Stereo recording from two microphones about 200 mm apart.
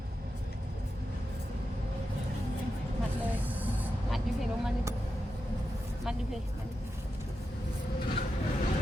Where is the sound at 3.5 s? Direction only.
10° right (ahead or behind).